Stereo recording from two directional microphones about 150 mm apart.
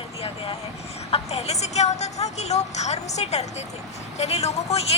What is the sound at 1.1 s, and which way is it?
A child's voice, 45° left (ahead or behind).